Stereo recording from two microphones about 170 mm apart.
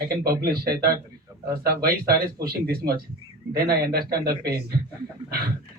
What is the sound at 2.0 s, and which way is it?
Speech, 65° right (ahead or behind).